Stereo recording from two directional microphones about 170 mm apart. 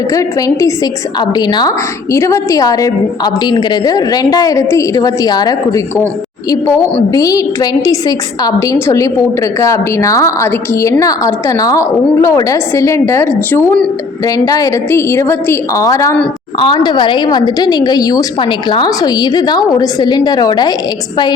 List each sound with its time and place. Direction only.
0.1 s a woman's voice: 20° left (ahead or behind)
7.1 s a woman's voice: 20° left (ahead or behind)